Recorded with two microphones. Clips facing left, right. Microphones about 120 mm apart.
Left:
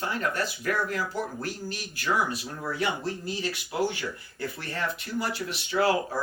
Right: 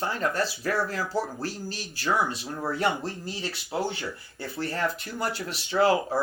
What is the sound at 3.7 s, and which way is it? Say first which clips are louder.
Speech: even; 30° right (ahead or behind).